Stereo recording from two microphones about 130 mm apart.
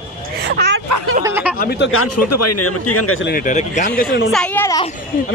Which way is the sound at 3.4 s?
75° left (ahead or behind).